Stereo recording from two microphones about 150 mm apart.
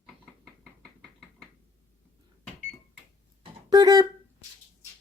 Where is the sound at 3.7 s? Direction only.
25° right (ahead or behind).